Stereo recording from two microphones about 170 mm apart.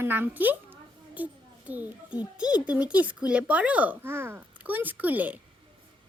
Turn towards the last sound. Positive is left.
turn(degrees=-10)  # may be behind; listen again after turning